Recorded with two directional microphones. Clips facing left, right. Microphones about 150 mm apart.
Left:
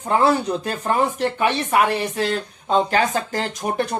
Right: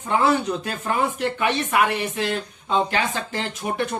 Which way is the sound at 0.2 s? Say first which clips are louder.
Left 1 dB; 35° left (ahead or behind).